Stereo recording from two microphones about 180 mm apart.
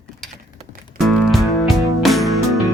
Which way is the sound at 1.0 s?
Centre (ahead or behind).